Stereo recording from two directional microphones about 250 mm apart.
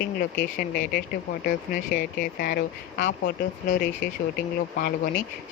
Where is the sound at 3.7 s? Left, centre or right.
Left.